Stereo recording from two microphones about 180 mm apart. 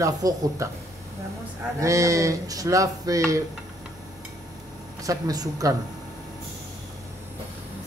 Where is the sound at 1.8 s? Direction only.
15° right (ahead or behind).